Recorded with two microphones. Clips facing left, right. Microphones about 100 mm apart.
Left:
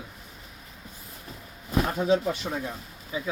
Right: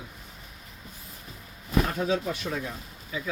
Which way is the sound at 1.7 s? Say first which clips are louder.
Left 2 dB; 20° left (ahead or behind).